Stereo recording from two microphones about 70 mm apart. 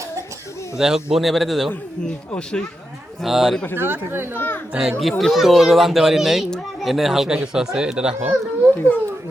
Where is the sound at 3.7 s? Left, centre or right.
Right.